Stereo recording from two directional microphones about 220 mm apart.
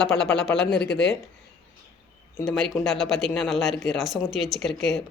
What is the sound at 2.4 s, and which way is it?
Speech, centre (ahead or behind).